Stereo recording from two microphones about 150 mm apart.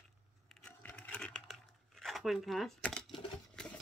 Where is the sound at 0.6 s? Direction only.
10° left (ahead or behind).